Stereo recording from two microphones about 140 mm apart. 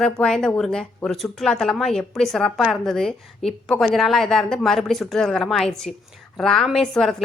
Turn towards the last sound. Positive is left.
turn(degrees=0)  # may be behind; listen again after turning